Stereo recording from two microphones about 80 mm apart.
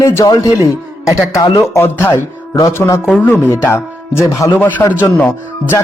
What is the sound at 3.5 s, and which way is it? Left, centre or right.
Speech, left.